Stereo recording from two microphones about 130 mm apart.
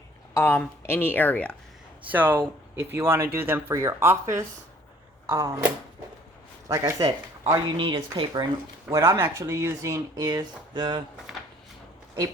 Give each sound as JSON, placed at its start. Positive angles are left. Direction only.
{"t": 0.3, "sound": "speech", "side_deg": 20}
{"t": 2.0, "sound": "speech", "side_deg": -15}
{"t": 6.7, "sound": "speech", "side_deg": -25}
{"t": 8.9, "sound": "speech", "side_deg": -20}